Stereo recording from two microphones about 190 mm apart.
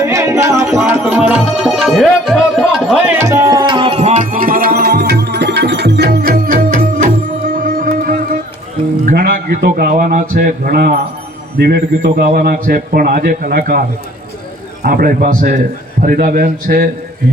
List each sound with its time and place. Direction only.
0.0 s music: 15° right (ahead or behind); by 8.4 s 50° right (ahead or behind)
9.0 s a man's voice: 50° right (ahead or behind)
14.8 s a man's voice: 50° right (ahead or behind)